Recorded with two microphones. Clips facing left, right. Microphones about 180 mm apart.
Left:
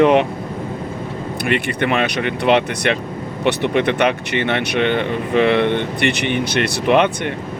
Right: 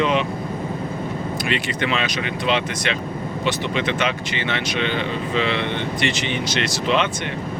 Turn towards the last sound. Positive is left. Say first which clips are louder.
# left 6 dB
turn(degrees=55)  # may be behind; listen again after turning